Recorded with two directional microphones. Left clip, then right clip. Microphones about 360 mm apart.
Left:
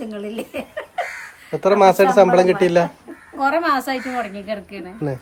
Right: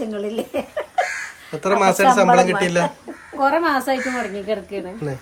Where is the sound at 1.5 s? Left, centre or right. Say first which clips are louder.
Left 4 dB; centre.